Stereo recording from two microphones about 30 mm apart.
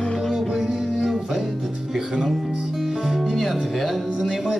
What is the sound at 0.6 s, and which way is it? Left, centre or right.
Music, centre.